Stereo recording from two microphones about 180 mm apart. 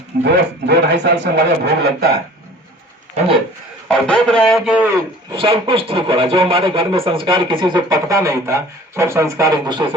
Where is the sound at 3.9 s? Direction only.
5° left (ahead or behind).